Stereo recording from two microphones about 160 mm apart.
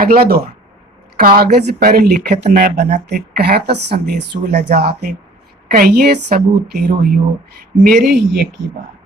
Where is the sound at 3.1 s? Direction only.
90° right.